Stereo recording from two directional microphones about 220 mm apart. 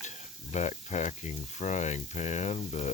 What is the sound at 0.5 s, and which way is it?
Speech, 30° left (ahead or behind).